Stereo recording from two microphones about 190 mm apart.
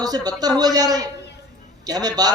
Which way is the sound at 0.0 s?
20° right (ahead or behind).